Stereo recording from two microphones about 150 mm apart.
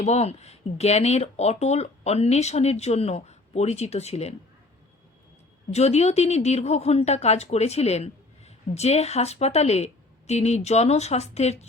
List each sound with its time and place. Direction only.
0.0 s speech: 45° left (ahead or behind)
5.7 s speech: 45° left (ahead or behind)